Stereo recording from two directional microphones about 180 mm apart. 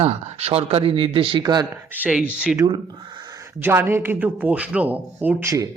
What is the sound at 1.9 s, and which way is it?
Speech, 10° right (ahead or behind).